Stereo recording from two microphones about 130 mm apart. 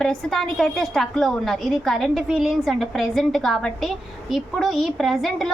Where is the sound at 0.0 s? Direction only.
5° left (ahead or behind).